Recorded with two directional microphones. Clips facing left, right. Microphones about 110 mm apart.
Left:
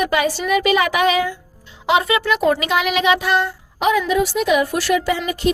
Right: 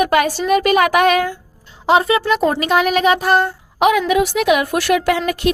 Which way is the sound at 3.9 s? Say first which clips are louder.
Left 3 dB; 70° right (ahead or behind).